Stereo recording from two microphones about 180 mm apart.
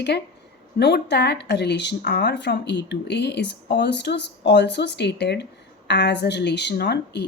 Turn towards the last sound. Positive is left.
turn(degrees=70)  # may be behind; listen again after turning